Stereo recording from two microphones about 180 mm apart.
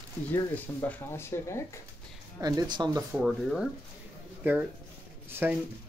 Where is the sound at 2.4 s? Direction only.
20° right (ahead or behind).